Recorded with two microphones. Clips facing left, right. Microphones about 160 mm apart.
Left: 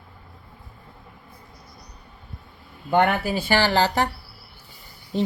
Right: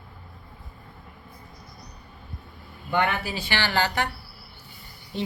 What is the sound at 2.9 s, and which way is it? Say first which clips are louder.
Speech: left 5 dB; 50° left (ahead or behind).